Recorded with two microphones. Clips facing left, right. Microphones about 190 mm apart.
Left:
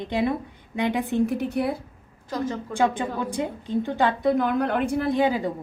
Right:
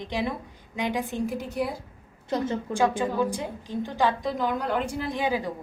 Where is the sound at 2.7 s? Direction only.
60° left (ahead or behind).